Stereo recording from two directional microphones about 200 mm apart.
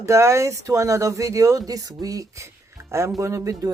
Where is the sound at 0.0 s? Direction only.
15° right (ahead or behind).